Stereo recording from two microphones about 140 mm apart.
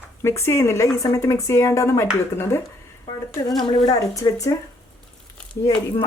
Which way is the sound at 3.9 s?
25° left (ahead or behind).